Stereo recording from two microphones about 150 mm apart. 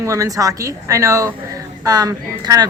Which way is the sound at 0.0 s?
20° right (ahead or behind).